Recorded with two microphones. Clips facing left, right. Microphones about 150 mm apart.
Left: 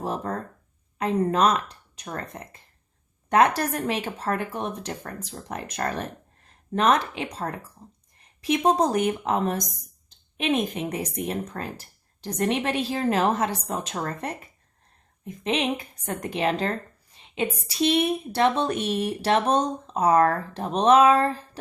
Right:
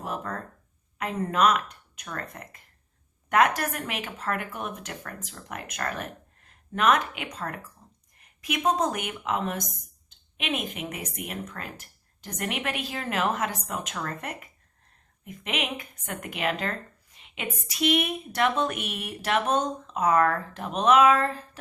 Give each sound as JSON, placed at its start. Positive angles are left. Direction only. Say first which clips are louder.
{"t": 0.0, "sound": "speech", "louder": "left 4 dB", "side_deg": 30}